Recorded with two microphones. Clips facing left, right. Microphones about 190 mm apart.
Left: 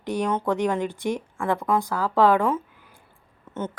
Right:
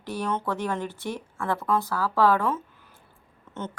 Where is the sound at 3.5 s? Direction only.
10° left (ahead or behind).